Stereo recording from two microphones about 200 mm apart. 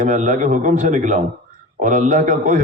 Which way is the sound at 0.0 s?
40° right (ahead or behind).